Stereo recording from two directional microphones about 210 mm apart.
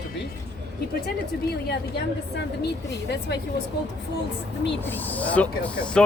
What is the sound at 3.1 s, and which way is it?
Speech, 50° left (ahead or behind).